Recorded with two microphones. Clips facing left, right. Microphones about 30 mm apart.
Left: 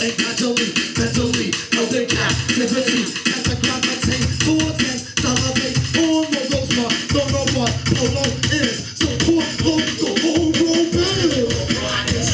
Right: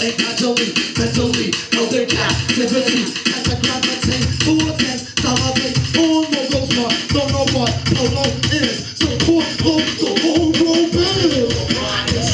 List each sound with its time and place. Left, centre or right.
0.0 s music: right
10.3 s music: right